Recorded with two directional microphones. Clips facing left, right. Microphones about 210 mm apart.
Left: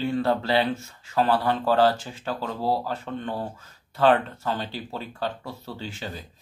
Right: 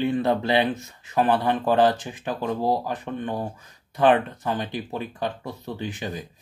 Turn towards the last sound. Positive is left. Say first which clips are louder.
# right 4 dB
turn(degrees=-15)  # may be behind; listen again after turning